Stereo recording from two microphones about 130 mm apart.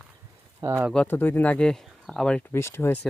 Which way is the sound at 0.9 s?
10° left (ahead or behind).